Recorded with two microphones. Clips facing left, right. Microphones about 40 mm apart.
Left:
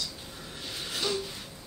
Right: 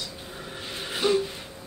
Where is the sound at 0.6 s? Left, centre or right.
Right.